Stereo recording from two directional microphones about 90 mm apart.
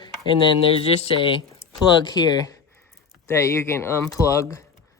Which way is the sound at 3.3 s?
30° left (ahead or behind).